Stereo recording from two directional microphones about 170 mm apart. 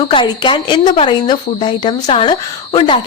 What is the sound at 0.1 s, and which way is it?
A woman's voice, 30° left (ahead or behind).